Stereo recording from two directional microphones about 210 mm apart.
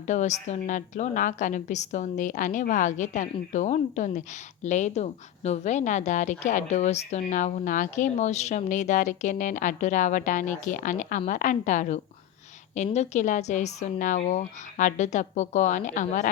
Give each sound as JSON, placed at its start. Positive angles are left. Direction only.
{"t": 0.1, "sound": "a woman's voice", "side_deg": 35}